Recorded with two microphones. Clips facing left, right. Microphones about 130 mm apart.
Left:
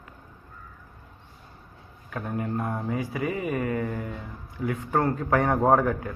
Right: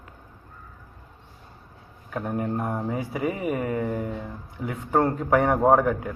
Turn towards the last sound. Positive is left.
turn(degrees=-10)  # may be behind; listen again after turning